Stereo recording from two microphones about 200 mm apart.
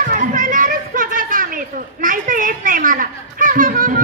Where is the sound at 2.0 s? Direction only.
40° right (ahead or behind).